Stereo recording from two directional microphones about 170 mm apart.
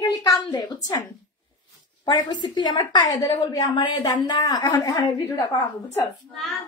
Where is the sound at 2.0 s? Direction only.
25° left (ahead or behind).